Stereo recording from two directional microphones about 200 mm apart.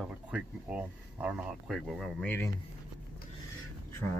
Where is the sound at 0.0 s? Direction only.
5° right (ahead or behind).